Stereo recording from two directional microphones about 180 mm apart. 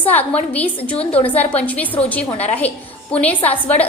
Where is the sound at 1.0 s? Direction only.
35° left (ahead or behind).